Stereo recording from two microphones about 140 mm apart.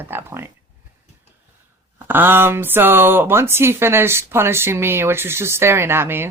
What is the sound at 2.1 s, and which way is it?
A woman's voice, 15° right (ahead or behind).